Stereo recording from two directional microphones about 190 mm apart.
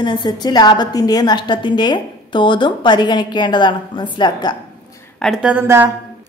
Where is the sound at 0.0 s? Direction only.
25° left (ahead or behind).